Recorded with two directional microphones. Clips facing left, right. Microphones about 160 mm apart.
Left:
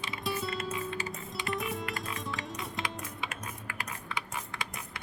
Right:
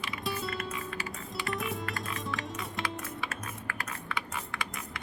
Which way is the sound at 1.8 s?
20° left (ahead or behind).